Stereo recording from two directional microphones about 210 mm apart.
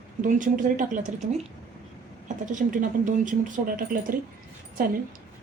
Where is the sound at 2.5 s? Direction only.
40° right (ahead or behind).